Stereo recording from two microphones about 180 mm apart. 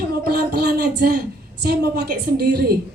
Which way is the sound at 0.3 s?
60° right (ahead or behind).